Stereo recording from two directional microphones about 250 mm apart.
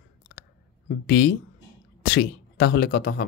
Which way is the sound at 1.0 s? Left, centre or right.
Left.